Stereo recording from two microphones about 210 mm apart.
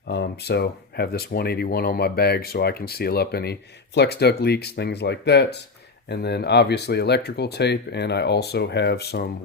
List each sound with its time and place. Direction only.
0.1 s speech: 50° left (ahead or behind)